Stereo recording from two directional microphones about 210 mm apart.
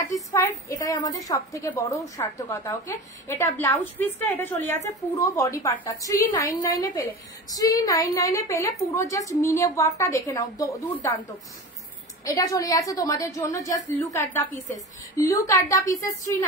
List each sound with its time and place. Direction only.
0.1 s a woman's voice: 15° left (ahead or behind)
12.3 s a woman's voice: 15° left (ahead or behind)